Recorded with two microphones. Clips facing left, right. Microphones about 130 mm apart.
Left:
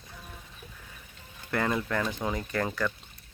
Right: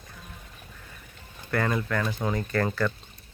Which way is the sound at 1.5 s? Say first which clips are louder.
Right 2 dB; 15° left (ahead or behind).